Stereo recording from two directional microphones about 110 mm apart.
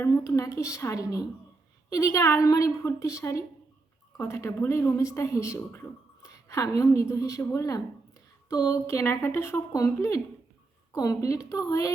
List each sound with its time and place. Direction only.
0.1 s a woman's voice: 30° left (ahead or behind)